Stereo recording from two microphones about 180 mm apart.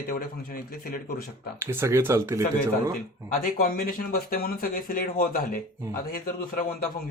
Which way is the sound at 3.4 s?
50° left (ahead or behind).